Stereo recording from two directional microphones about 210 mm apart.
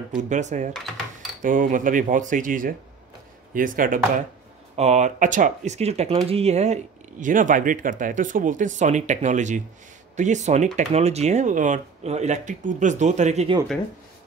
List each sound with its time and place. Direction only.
0.3 s speech: 35° right (ahead or behind)